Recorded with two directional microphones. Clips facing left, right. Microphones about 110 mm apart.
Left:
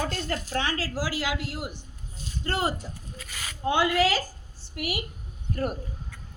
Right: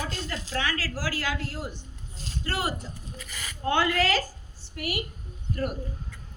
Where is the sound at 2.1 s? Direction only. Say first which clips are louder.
Even; 90° right.